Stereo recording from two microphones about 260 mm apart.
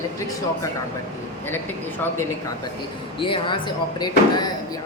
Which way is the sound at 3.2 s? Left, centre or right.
Centre.